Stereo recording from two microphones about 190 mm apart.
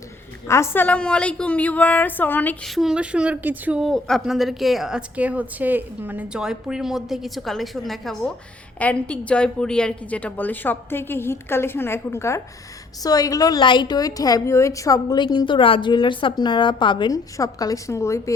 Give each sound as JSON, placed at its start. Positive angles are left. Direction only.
{"t": 0.4, "sound": "a woman's voice", "side_deg": 15}